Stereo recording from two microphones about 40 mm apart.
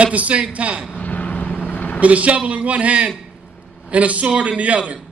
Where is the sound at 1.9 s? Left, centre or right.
Right.